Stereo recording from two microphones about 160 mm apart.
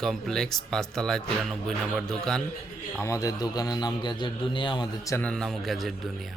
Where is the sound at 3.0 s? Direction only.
20° left (ahead or behind).